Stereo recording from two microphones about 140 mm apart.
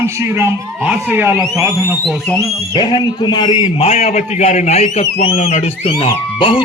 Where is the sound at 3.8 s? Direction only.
50° left (ahead or behind).